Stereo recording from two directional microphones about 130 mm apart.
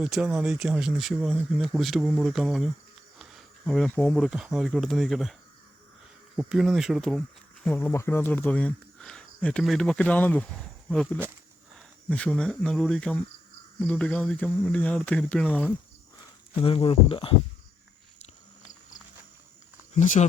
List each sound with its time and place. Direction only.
0.0 s speech: 5° right (ahead or behind)
3.2 s insect: centre (ahead or behind)
3.9 s speech: 10° left (ahead or behind)
7.7 s speech: 15° left (ahead or behind)
16.6 s speech: 45° left (ahead or behind)
20.2 s speech: 55° left (ahead or behind)